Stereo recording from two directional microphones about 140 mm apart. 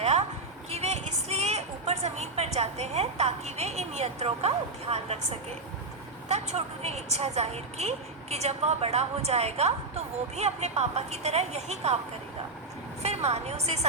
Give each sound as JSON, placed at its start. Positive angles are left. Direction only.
{"t": 0.0, "sound": "a sound", "side_deg": -50}
{"t": 0.7, "sound": "vehicle", "side_deg": -50}
{"t": 6.2, "sound": "a woman's voice", "side_deg": -50}
{"t": 13.0, "sound": "a woman's voice", "side_deg": -50}